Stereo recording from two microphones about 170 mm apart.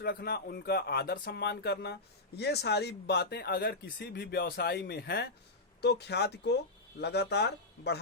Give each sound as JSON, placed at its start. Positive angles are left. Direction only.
{"t": 0.0, "sound": "speech", "side_deg": 70}